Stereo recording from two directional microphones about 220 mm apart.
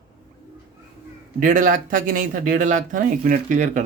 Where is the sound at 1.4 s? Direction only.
35° right (ahead or behind).